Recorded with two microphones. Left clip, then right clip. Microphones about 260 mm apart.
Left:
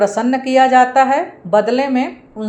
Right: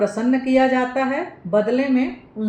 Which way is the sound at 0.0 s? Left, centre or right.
Centre.